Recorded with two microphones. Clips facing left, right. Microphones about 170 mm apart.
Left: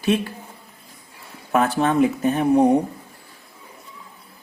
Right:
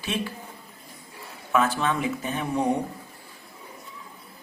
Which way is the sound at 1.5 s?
45° left (ahead or behind).